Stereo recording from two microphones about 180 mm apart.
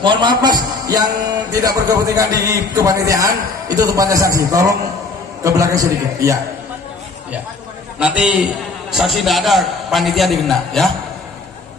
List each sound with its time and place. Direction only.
0.0 s a man's voice: 25° right (ahead or behind)
8.0 s a man's voice: 5° right (ahead or behind)